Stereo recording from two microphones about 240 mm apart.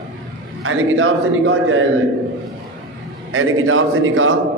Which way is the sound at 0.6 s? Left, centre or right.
Right.